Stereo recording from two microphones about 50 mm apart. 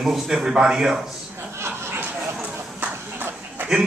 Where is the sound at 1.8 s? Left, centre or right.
Right.